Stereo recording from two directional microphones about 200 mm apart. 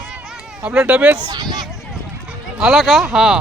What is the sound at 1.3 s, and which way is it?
Speech, 20° right (ahead or behind).